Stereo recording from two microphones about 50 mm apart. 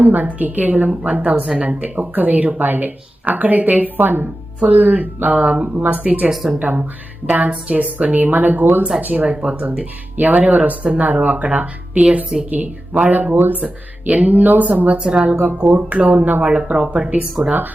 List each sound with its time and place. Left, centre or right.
0.0 s speech: right
6.3 s speech: centre
6.6 s speech: right
13.3 s speech: right
13.6 s speech: right
14.9 s speech: centre
15.3 s speech: right
16.6 s speech: centre